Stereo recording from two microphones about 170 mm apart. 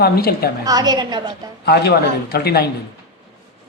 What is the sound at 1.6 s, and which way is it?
A man's voice, 75° left (ahead or behind).